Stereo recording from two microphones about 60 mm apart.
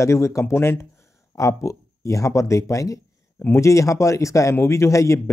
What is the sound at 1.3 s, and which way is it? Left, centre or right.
A man's voice, left.